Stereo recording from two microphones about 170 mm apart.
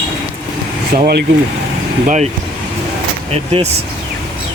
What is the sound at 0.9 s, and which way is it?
Speech, 60° right (ahead or behind).